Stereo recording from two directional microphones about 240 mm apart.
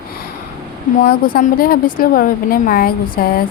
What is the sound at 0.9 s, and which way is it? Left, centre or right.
A woman's voice, left.